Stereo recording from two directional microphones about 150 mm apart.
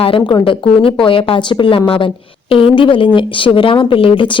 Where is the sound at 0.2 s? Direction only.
30° left (ahead or behind).